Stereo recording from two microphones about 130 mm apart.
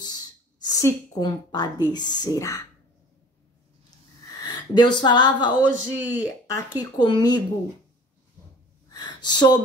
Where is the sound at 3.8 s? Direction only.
30° left (ahead or behind).